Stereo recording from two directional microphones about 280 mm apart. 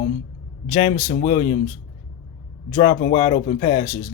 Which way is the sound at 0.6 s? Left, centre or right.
Left.